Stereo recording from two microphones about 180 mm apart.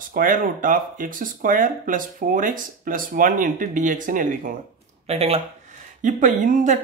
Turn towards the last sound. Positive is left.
turn(degrees=-45)  # may be behind; listen again after turning